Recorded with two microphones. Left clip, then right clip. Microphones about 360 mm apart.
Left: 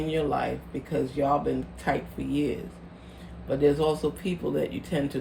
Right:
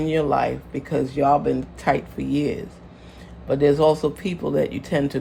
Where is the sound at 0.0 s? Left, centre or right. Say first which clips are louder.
Right 7 dB; centre.